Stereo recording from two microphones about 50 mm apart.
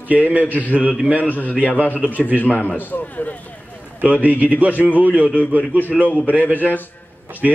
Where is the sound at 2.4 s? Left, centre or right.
Left.